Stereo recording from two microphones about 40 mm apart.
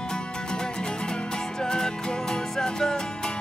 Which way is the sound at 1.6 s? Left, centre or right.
Centre.